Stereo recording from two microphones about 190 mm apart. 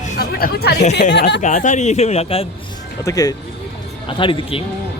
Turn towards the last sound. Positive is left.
turn(degrees=30)  # may be behind; listen again after turning